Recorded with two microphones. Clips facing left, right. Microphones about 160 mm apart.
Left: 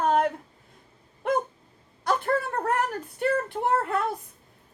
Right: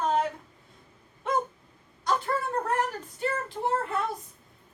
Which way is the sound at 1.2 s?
55° left (ahead or behind).